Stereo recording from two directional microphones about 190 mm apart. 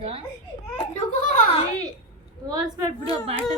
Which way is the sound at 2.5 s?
20° right (ahead or behind).